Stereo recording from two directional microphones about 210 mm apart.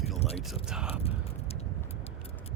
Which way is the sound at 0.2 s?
30° left (ahead or behind).